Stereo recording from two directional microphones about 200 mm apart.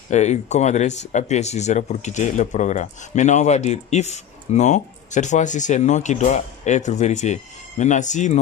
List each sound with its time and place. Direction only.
0.1 s speech: 35° left (ahead or behind)